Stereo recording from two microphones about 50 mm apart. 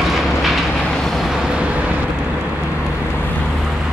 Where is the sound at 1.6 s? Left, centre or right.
Right.